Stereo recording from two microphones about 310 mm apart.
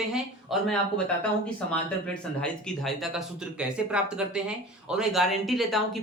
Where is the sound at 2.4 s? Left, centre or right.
Centre.